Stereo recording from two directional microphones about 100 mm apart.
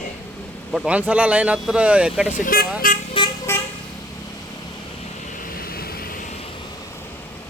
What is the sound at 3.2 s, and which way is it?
Vehicle, 55° left (ahead or behind).